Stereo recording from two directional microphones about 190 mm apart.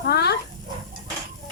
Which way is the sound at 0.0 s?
55° left (ahead or behind).